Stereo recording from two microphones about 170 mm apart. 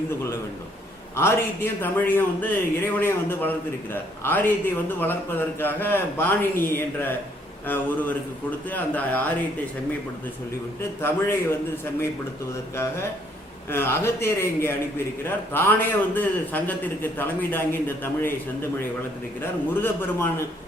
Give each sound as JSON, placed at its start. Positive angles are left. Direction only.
{"t": 1.1, "sound": "a man's voice", "side_deg": 15}
{"t": 12.7, "sound": "a man's voice", "side_deg": 15}
{"t": 19.4, "sound": "a man's voice", "side_deg": 15}